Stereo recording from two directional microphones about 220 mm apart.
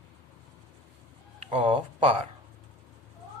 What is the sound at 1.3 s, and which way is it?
Speech, 25° right (ahead or behind).